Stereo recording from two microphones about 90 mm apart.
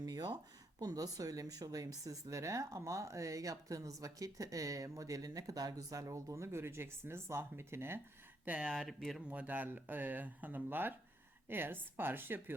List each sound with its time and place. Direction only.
0.0 s a sound: 50° right (ahead or behind)
0.8 s speech: 45° right (ahead or behind); by 8.0 s 25° right (ahead or behind)
8.4 s speech: 15° right (ahead or behind)
8.7 s speech: centre (ahead or behind)
9.3 s speech: 20° right (ahead or behind)